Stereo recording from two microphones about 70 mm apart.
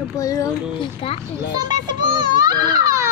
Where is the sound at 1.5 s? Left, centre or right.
Right.